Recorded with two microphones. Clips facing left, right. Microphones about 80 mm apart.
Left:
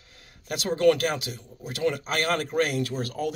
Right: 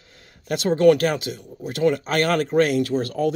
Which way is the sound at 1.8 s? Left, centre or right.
Right.